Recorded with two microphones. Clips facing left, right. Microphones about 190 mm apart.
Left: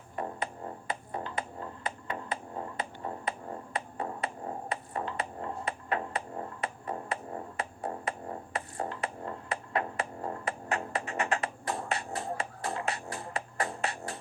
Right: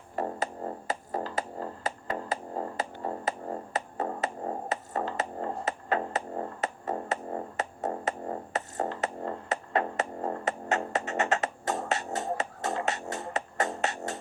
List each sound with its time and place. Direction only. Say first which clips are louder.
0.2 s music: right 4 dB; 40° right (ahead or behind)